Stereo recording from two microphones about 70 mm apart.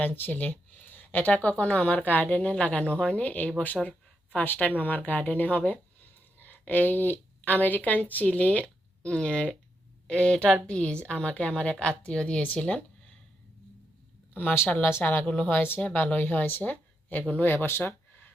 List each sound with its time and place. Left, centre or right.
0.0 s a woman's voice: left
14.3 s speech: left